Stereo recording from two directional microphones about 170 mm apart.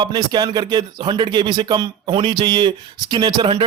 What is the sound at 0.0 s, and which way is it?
Speech, 25° right (ahead or behind).